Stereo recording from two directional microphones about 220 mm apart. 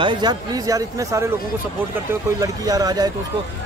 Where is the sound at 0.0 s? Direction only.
20° right (ahead or behind).